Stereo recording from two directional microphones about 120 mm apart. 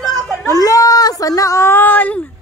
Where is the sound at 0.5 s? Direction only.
30° left (ahead or behind); by 2.3 s 15° left (ahead or behind).